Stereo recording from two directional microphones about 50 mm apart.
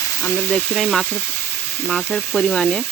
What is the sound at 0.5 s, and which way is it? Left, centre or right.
Speech, centre.